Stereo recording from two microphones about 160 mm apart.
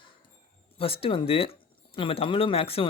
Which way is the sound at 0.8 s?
35° left (ahead or behind).